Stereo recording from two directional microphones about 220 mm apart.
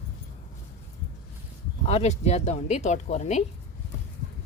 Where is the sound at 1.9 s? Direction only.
30° left (ahead or behind).